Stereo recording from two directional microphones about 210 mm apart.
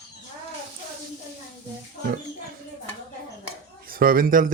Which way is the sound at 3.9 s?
45° right (ahead or behind).